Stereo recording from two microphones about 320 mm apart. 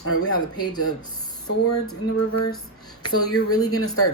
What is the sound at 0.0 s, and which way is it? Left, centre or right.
Speech, left.